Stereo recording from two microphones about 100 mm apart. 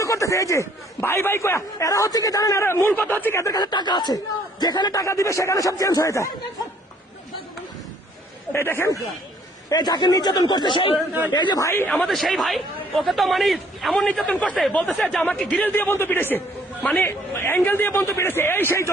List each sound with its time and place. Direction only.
0.0 s a man's voice: 30° left (ahead or behind)
3.4 s a man's voice: 40° left (ahead or behind)
8.5 s a man's voice: 25° left (ahead or behind)
9.6 s a man's voice: 45° left (ahead or behind)
12.0 s speech: centre (ahead or behind)
15.7 s a man's voice: 20° left (ahead or behind)